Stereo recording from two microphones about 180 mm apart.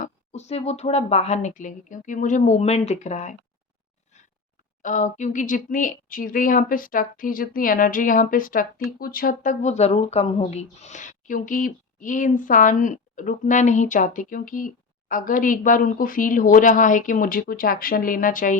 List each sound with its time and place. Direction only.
0.0 s speech: 40° left (ahead or behind)
4.8 s speech: 45° left (ahead or behind)